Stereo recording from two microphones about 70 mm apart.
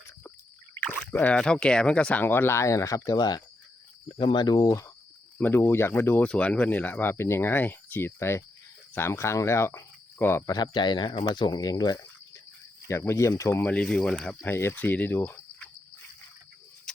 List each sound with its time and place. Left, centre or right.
0.3 s a sound: left
1.1 s speech: centre
2.2 s speech: left
3.2 s speech: left
5.4 s speech: left
6.2 s speech: centre; by 10.5 s left
10.5 s speech: left
12.9 s speech: left
13.9 s speech: centre
14.4 s speech: left